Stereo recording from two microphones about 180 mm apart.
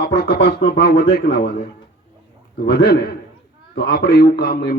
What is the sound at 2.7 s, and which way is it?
A man's voice, 65° left (ahead or behind).